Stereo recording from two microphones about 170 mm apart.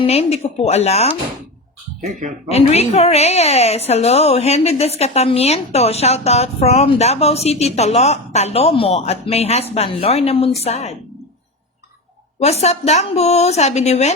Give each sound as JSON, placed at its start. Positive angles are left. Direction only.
{"t": 0.0, "sound": "a woman's voice", "side_deg": 35}
{"t": 2.0, "sound": "speech", "side_deg": -45}
{"t": 2.5, "sound": "a woman's voice", "side_deg": 40}
{"t": 12.4, "sound": "a woman's voice", "side_deg": 40}